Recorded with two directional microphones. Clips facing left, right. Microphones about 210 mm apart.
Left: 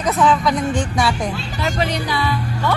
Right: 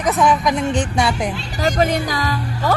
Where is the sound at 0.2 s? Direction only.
15° right (ahead or behind).